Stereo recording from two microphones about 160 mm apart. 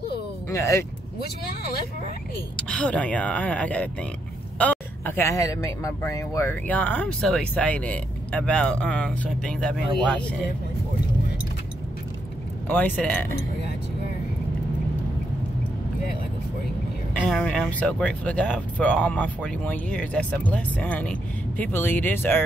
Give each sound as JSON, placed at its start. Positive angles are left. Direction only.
{"t": 0.5, "sound": "speech", "side_deg": 20}
{"t": 2.5, "sound": "a man's voice", "side_deg": 5}
{"t": 12.6, "sound": "a man's voice", "side_deg": 10}
{"t": 17.1, "sound": "a man's voice", "side_deg": 10}